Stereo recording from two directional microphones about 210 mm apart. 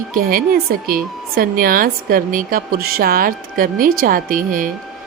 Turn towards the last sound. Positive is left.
turn(degrees=-40)  # may be behind; listen again after turning